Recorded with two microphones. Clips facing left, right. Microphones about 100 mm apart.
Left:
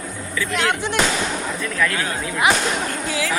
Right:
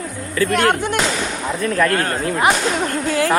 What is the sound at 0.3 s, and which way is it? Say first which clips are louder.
Speech: right 6 dB; 50° right (ahead or behind).